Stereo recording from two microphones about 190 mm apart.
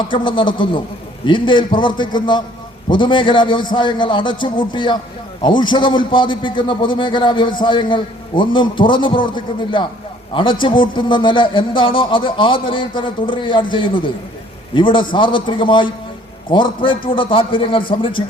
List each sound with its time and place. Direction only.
0.1 s a man's voice: 25° left (ahead or behind)